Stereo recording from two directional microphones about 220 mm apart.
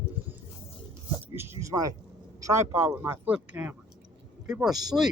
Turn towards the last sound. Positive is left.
turn(degrees=-15)  # may be behind; listen again after turning